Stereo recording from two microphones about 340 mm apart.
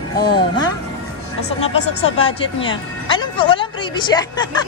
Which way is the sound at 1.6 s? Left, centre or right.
Centre.